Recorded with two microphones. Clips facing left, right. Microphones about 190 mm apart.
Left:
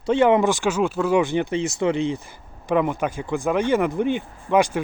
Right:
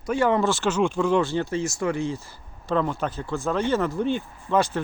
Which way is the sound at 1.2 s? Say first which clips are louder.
Left 3 dB; 15° left (ahead or behind).